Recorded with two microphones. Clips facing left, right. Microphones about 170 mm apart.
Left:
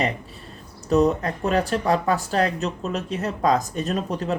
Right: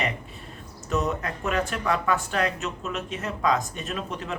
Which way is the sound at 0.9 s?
35° left (ahead or behind).